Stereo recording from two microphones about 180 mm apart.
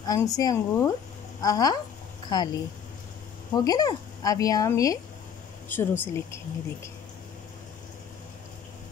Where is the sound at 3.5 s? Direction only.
20° left (ahead or behind).